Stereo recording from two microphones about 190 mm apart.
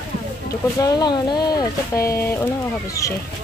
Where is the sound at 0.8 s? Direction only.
20° left (ahead or behind).